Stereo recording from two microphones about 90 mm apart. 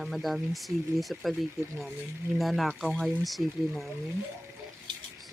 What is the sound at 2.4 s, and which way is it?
Speech, centre (ahead or behind).